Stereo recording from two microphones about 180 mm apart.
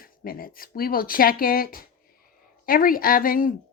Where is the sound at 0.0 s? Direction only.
55° left (ahead or behind).